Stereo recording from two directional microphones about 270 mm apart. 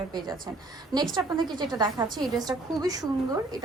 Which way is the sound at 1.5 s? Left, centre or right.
Centre.